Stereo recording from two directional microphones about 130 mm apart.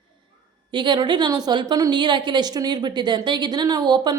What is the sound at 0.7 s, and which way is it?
A woman's voice, 35° right (ahead or behind).